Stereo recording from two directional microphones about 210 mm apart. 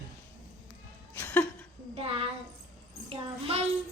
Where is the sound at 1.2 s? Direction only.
10° left (ahead or behind).